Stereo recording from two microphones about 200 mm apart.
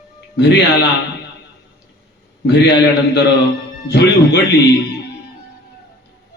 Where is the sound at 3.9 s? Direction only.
60° left (ahead or behind).